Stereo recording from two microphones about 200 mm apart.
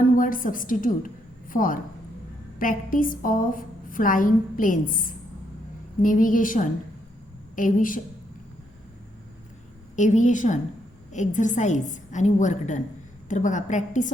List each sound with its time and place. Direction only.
0.2 s a woman's voice: 45° left (ahead or behind)
9.9 s a woman's voice: 40° left (ahead or behind)